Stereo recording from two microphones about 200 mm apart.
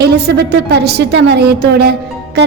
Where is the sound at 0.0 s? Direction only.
55° right (ahead or behind).